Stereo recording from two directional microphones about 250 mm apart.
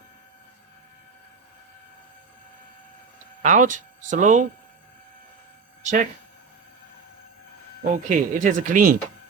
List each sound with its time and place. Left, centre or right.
3.4 s speech: right
5.8 s speech: right
7.9 s speech: right